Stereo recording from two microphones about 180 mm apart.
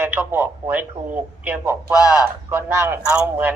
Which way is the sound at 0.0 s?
10° right (ahead or behind).